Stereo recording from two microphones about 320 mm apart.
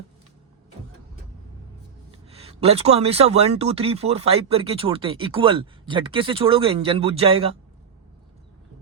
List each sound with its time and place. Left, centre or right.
2.3 s speech: centre